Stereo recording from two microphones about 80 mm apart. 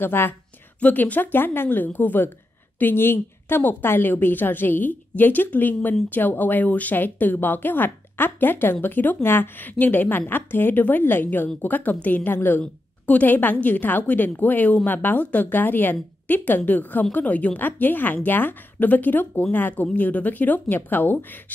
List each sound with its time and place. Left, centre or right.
0.0 s a woman's voice: left